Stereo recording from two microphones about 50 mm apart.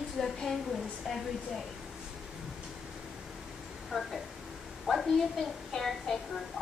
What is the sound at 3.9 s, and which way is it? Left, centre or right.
Speech, centre.